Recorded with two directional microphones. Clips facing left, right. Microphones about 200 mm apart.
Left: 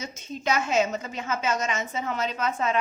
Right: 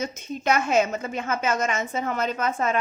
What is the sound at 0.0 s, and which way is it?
A woman's voice, 55° right (ahead or behind).